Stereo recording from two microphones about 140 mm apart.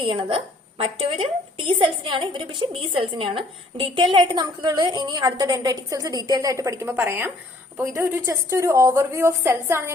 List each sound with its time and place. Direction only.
0.0 s a woman's voice: 40° right (ahead or behind); by 9.9 s 20° right (ahead or behind)